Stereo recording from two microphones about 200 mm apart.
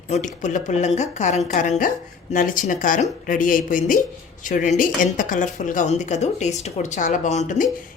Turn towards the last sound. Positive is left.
turn(degrees=35)  # may be behind; listen again after turning